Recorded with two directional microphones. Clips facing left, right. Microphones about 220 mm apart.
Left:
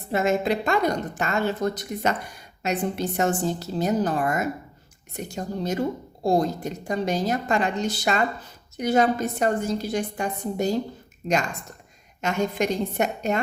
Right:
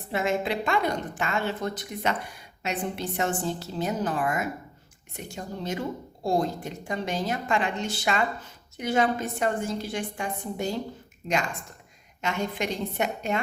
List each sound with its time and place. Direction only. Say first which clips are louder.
0.1 s a woman's voice: left 4 dB; 40° left (ahead or behind)
12.2 s a woman's voice: left 5 dB; 45° left (ahead or behind)